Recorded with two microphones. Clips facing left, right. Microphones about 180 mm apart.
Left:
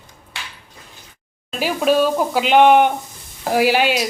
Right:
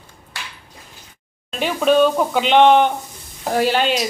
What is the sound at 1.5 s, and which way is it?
Speech, 5° left (ahead or behind).